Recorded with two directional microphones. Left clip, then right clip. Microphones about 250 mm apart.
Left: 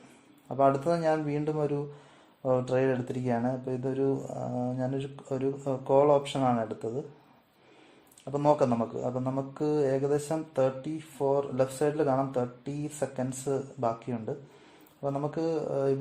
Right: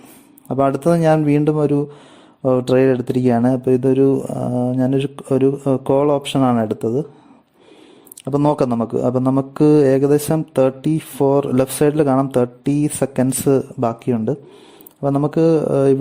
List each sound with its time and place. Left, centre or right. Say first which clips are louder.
0.4 s speech: right 9 dB; right
8.2 s speech: right 8 dB; right